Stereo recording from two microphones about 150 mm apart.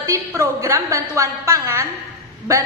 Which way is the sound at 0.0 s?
20° right (ahead or behind).